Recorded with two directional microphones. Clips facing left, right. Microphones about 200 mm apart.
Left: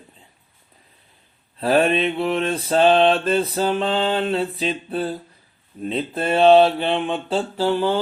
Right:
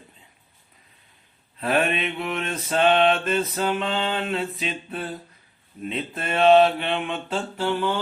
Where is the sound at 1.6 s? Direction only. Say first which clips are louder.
Left 5 dB; 35° left (ahead or behind).